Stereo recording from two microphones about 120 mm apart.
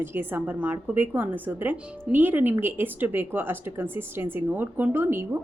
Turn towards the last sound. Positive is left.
turn(degrees=-20)  # may be behind; listen again after turning